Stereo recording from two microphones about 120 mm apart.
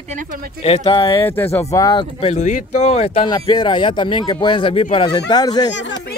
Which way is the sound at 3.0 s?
50° left (ahead or behind).